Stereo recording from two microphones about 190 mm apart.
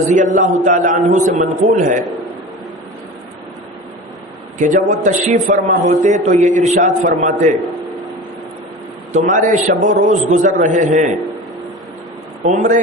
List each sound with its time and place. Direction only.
0.3 s a man's voice: 40° right (ahead or behind)
4.5 s a man's voice: 40° right (ahead or behind)
9.1 s a man's voice: 40° right (ahead or behind)
12.5 s a man's voice: 40° right (ahead or behind)